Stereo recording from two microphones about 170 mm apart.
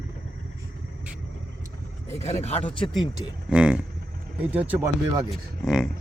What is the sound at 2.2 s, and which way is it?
Speech, 40° left (ahead or behind).